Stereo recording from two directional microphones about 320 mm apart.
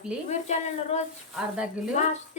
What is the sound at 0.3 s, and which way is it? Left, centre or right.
Speech, left.